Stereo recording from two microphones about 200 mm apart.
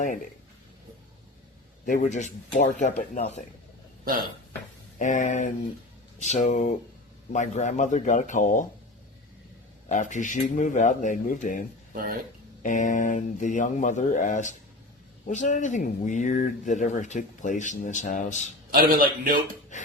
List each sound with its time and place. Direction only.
1.8 s speech: 40° left (ahead or behind)
4.0 s speech: 50° right (ahead or behind)
4.9 s speech: 35° left (ahead or behind)
9.9 s speech: 40° left (ahead or behind)
11.9 s a man's voice: 45° right (ahead or behind)
12.6 s speech: 40° left (ahead or behind)
18.7 s a man's voice: 45° right (ahead or behind)
19.7 s a sound: 40° left (ahead or behind)